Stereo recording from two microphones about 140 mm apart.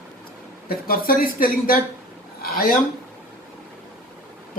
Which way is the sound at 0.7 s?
90° left.